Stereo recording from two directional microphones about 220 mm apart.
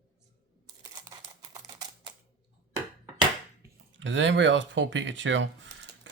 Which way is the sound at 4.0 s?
55° right (ahead or behind).